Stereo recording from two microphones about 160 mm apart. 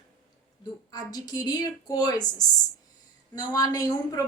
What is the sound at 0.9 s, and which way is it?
Speech, 25° left (ahead or behind).